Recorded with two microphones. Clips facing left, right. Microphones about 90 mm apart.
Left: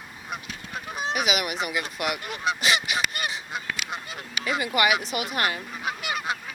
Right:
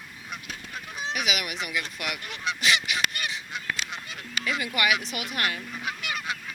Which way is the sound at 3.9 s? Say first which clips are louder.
Left 4 dB; 45° left (ahead or behind).